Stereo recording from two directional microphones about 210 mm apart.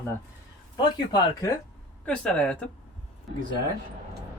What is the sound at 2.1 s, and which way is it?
Speech, 5° left (ahead or behind).